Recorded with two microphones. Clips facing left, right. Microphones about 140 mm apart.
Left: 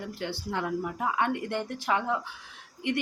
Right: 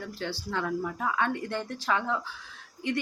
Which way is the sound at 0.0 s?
20° left (ahead or behind).